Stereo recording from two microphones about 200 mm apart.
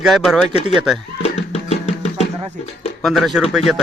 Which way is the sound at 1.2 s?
30° left (ahead or behind).